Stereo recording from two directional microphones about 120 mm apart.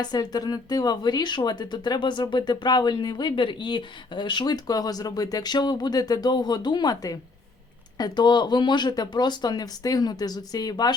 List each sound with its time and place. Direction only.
0.0 s speech: 35° left (ahead or behind)